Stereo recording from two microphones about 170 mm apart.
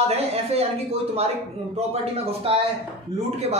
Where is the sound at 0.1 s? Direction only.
40° right (ahead or behind).